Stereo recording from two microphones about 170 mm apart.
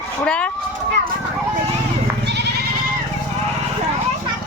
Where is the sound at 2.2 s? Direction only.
90° right.